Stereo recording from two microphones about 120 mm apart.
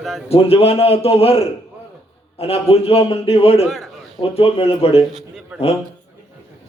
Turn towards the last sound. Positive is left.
turn(degrees=-5)  # may be behind; listen again after turning